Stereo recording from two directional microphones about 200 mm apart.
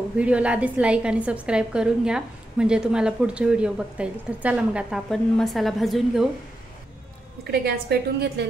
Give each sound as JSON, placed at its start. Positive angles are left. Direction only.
{"t": 0.2, "sound": "a woman's voice", "side_deg": -5}
{"t": 7.6, "sound": "a woman's voice", "side_deg": -55}